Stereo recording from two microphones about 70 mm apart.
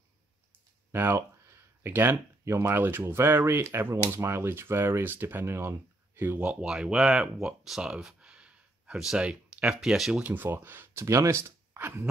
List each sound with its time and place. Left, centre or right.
0.9 s speech: right
5.7 s speech: right
6.6 s speech: centre
9.3 s a sound: centre
9.8 s speech: centre
10.2 s speech: right
11.1 s speech: right